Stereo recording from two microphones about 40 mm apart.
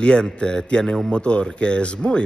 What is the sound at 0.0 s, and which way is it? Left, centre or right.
A man's voice, left.